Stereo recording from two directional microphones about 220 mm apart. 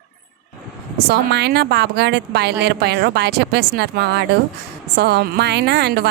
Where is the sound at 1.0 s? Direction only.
50° right (ahead or behind).